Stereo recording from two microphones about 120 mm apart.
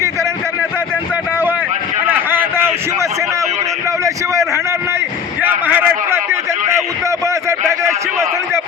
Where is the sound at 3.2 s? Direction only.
25° right (ahead or behind).